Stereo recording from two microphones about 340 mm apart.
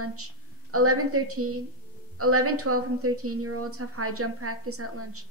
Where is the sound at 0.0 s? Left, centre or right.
Right.